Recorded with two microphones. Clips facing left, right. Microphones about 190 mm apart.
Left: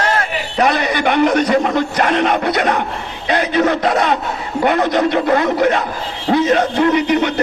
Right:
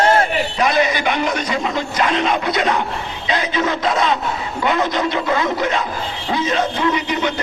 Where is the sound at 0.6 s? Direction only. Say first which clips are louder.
Left 3 dB; 60° left (ahead or behind).